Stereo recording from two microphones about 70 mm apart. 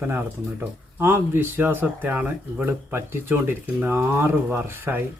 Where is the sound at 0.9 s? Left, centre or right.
Right.